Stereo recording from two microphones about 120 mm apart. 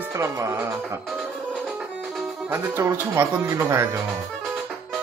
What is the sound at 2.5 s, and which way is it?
Speech, 20° right (ahead or behind).